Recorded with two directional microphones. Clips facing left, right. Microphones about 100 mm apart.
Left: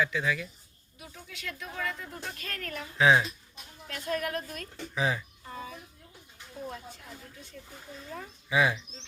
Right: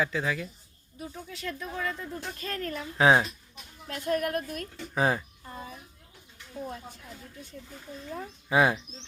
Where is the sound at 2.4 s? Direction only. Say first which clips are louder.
Right 5 dB; 30° right (ahead or behind).